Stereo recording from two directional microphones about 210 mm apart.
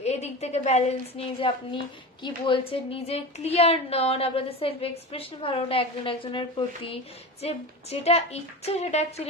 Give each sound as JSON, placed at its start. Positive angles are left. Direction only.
{"t": 0.0, "sound": "a woman's voice", "side_deg": 30}